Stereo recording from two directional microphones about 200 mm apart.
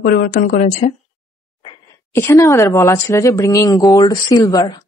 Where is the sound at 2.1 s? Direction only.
15° left (ahead or behind).